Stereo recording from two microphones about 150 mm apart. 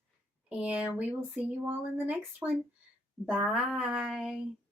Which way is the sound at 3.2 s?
5° right (ahead or behind).